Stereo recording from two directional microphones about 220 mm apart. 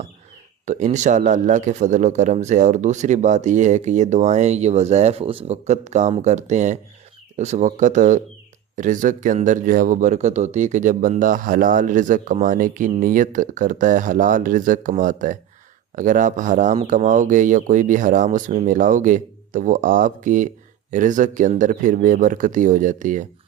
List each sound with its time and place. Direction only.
0.6 s speech: 35° right (ahead or behind)